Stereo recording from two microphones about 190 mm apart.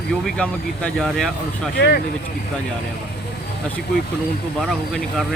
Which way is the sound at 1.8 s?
55° left (ahead or behind).